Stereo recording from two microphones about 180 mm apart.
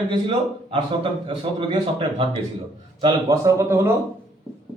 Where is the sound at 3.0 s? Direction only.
20° right (ahead or behind).